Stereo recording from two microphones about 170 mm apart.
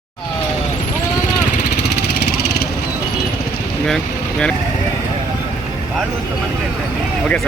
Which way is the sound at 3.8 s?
5° left (ahead or behind).